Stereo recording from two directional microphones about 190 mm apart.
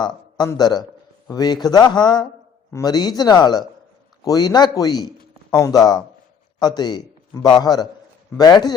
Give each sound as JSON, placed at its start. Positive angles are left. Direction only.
{"t": 0.0, "sound": "a man's voice", "side_deg": 20}